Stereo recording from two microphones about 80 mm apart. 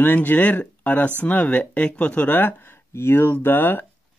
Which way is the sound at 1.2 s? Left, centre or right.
Centre.